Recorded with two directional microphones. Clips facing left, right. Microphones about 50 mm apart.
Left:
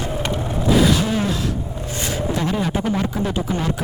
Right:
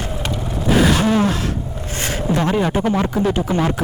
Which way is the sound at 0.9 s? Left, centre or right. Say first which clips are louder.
Right 3 dB; right.